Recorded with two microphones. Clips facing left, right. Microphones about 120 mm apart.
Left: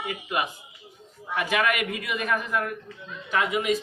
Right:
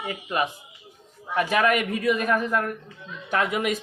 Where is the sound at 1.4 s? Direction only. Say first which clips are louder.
Right 4 dB; 40° right (ahead or behind).